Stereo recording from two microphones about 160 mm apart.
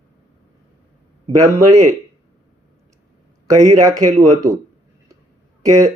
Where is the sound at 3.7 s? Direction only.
20° right (ahead or behind).